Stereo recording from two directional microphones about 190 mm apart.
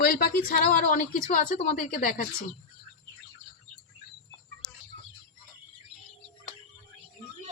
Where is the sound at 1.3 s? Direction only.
40° left (ahead or behind).